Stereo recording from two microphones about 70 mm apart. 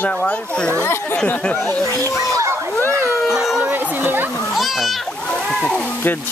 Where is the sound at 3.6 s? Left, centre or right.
Right.